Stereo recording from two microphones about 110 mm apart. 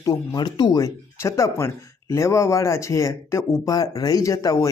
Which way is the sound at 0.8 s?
30° left (ahead or behind).